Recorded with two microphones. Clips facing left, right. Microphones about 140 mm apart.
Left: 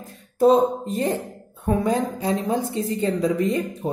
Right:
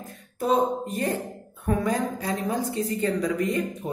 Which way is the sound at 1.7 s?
25° left (ahead or behind).